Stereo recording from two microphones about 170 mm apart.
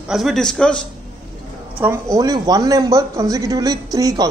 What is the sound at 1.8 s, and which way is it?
A man's voice, 15° right (ahead or behind).